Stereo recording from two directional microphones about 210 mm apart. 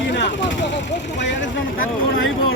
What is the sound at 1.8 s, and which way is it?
Speech, 70° left (ahead or behind).